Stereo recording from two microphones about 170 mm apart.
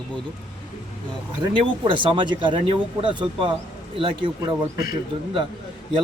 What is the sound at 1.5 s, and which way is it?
A man's voice, 30° right (ahead or behind).